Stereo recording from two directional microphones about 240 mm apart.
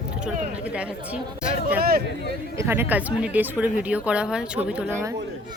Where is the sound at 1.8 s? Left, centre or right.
Right.